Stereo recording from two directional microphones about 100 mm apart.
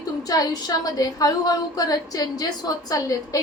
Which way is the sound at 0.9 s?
40° left (ahead or behind).